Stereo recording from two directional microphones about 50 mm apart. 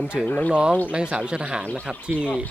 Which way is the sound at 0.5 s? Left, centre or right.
Right.